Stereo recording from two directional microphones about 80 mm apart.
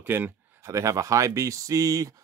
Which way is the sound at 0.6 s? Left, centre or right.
Right.